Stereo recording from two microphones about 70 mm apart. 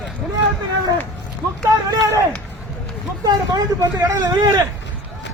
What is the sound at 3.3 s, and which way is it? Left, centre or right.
Speech, right.